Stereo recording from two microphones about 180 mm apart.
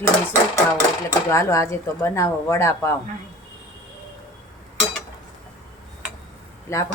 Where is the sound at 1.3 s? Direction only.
15° left (ahead or behind).